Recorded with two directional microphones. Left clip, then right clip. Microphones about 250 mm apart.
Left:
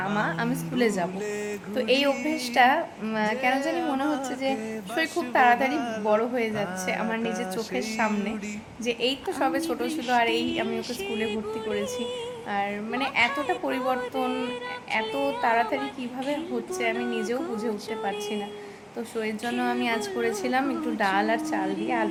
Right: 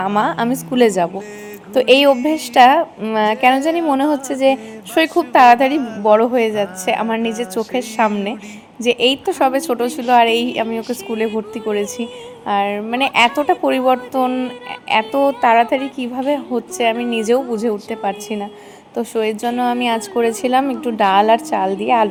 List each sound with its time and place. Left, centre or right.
0.0 s a woman's voice: right
10.7 s speech: centre
11.7 s a woman's voice: right